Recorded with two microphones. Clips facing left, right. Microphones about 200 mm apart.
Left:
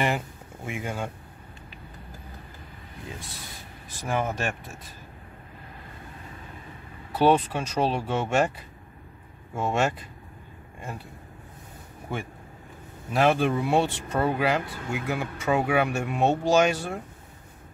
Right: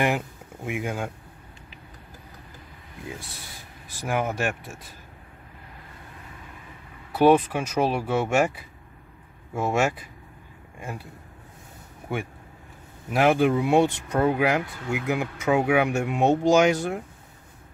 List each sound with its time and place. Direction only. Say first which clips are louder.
0.7 s speech: right 3 dB; 10° right (ahead or behind)
4.0 s speech: right 2 dB; 10° right (ahead or behind)
7.2 s speech: right 3 dB; 10° right (ahead or behind)
13.1 s speech: right 2 dB; 10° right (ahead or behind)